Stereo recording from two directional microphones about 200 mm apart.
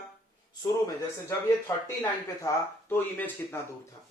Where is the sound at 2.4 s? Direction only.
10° left (ahead or behind).